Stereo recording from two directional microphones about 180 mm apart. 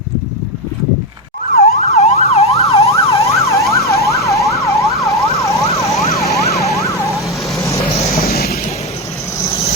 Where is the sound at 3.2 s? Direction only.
15° left (ahead or behind).